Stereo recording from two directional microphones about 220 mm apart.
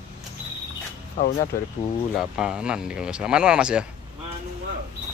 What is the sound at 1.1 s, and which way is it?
Speech, 35° left (ahead or behind).